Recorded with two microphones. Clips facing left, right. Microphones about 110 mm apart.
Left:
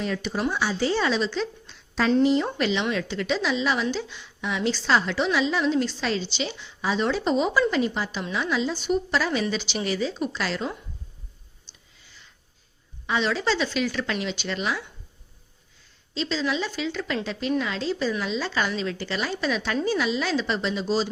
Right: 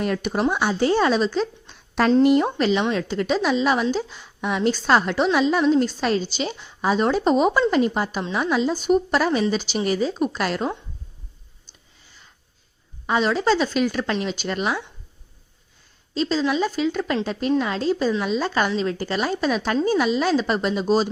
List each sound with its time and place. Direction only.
0.0 s a woman's voice: 55° right (ahead or behind)
2.2 s speech: 55° right (ahead or behind)
2.6 s a woman's voice: 40° right (ahead or behind)
11.7 s whispering: 45° right (ahead or behind)
13.1 s a woman's voice: 45° right (ahead or behind)
16.1 s a woman's voice: 45° right (ahead or behind)